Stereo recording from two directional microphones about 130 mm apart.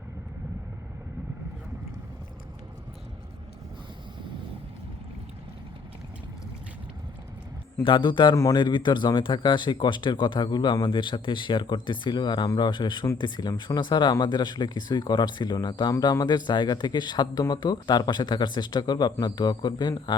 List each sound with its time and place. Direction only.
7.8 s speech: 40° left (ahead or behind)